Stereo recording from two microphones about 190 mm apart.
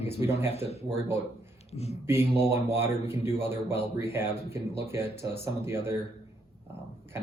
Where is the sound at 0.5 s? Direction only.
35° left (ahead or behind).